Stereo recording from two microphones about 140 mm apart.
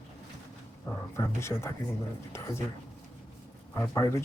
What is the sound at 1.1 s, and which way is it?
Speech, 20° left (ahead or behind).